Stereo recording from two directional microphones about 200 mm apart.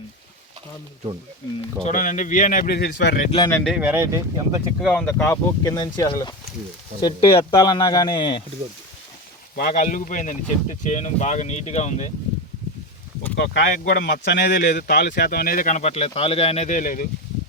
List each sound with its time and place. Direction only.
1.8 s speech: 40° left (ahead or behind)
3.3 s speech: 20° left (ahead or behind)
3.6 s speech: 5° right (ahead or behind)
4.8 s speech: 5° left (ahead or behind); by 8.4 s 25° left (ahead or behind)
9.6 s speech: 40° left (ahead or behind)
13.3 s speech: 60° left (ahead or behind); by 17.1 s 40° left (ahead or behind)